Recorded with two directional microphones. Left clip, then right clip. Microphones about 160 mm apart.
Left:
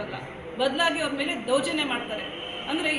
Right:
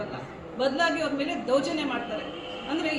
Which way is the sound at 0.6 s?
10° right (ahead or behind).